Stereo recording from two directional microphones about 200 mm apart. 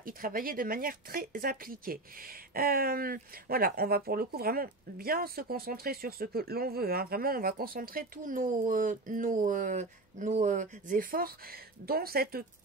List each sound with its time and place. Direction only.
0.0 s speech: 45° right (ahead or behind)